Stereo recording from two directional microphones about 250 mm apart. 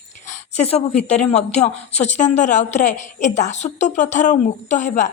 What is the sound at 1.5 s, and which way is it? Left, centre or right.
A woman's voice, left.